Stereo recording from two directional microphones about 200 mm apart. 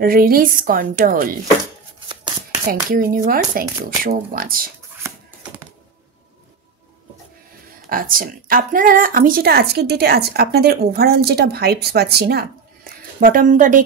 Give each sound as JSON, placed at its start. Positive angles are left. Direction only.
{"t": 0.0, "sound": "a woman's voice", "side_deg": -45}
{"t": 2.7, "sound": "a woman's voice", "side_deg": -45}
{"t": 7.9, "sound": "a woman's voice", "side_deg": -45}